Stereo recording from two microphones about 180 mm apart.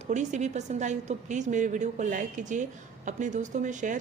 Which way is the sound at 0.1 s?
40° right (ahead or behind).